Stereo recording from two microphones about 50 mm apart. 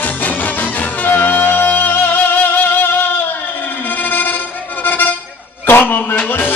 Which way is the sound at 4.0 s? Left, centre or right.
Left.